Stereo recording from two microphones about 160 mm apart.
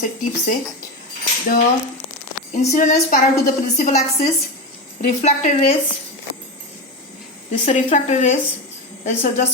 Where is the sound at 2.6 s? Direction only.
45° left (ahead or behind).